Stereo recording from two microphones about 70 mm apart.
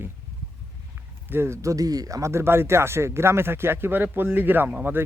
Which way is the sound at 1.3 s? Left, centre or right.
Right.